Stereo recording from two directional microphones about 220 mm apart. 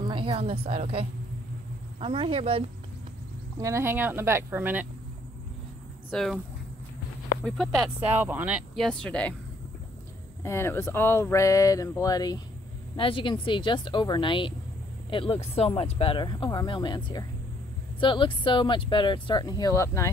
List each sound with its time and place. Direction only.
0.0 s a woman's voice: 20° right (ahead or behind)
3.5 s speech: 15° right (ahead or behind)
6.0 s speech: centre (ahead or behind)
7.4 s speech: centre (ahead or behind)
10.4 s speech: 10° left (ahead or behind)